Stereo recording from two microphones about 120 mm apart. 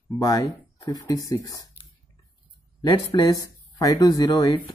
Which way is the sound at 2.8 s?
35° left (ahead or behind).